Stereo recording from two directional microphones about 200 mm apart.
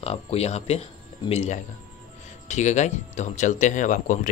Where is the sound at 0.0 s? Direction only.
30° left (ahead or behind).